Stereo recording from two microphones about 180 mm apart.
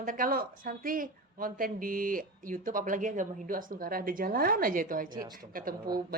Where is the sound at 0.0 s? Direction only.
50° right (ahead or behind).